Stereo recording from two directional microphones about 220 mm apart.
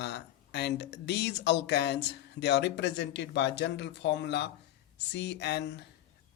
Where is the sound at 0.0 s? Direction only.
50° left (ahead or behind).